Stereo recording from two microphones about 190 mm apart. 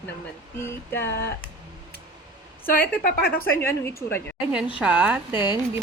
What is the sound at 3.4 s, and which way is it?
Speech, 15° left (ahead or behind).